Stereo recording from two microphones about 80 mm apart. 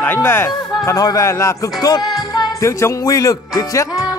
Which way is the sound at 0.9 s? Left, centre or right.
Left.